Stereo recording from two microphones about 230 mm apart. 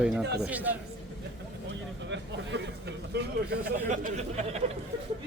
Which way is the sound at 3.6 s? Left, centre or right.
Right.